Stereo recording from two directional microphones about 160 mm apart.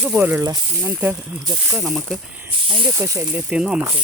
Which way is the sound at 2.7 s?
30° right (ahead or behind).